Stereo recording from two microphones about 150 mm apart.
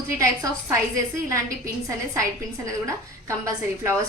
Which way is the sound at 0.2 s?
20° right (ahead or behind).